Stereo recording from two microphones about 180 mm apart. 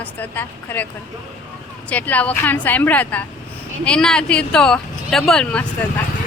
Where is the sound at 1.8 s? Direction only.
10° left (ahead or behind).